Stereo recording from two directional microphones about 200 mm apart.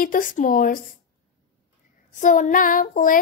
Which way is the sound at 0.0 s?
45° left (ahead or behind).